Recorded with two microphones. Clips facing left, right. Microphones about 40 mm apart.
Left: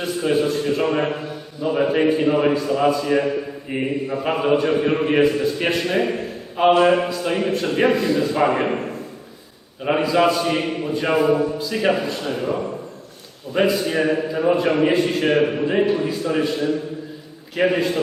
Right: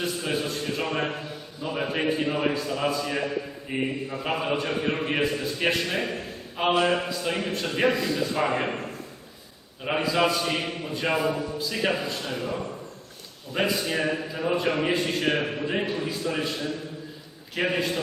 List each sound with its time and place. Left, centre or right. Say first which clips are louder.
0.0 s a man's voice: left 8 dB; centre
9.8 s a man's voice: left 6 dB; centre
12.3 s a man's voice: left 9 dB; centre
13.5 s a man's voice: left 7 dB; centre